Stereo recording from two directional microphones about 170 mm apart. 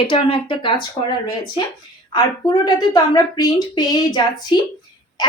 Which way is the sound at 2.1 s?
25° left (ahead or behind).